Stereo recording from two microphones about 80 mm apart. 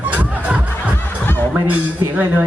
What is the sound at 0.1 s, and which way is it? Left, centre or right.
Music, right.